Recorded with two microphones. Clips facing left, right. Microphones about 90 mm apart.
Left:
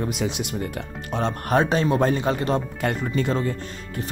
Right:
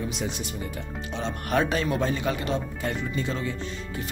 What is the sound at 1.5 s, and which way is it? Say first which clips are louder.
Speech: left 4 dB; 30° left (ahead or behind).